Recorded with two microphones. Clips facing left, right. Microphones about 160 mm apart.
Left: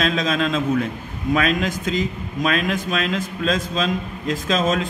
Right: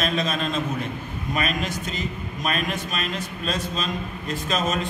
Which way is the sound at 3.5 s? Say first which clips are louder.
Left 5 dB; 90° left.